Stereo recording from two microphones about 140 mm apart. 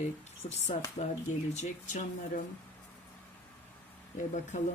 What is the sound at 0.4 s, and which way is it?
Speech, 50° left (ahead or behind).